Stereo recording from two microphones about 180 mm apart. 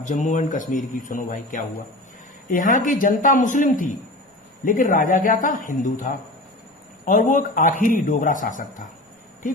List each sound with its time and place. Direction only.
0.0 s a man's voice: 45° left (ahead or behind)